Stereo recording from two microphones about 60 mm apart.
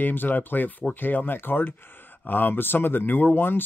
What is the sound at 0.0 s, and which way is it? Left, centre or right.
Speech, left.